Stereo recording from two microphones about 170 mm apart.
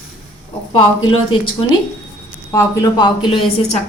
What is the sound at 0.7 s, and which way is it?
Speech, 30° left (ahead or behind).